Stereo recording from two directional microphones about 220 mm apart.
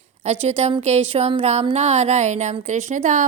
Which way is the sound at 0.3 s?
30° right (ahead or behind).